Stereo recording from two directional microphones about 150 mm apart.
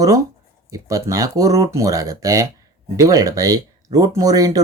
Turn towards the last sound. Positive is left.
turn(degrees=-25)  # may be behind; listen again after turning